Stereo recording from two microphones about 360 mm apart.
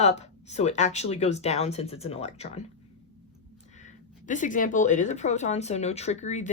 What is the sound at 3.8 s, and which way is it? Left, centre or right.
Speech, left.